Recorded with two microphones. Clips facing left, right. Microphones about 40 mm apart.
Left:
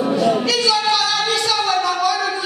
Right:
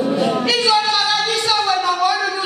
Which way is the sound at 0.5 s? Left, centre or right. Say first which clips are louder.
Right 2 dB; right.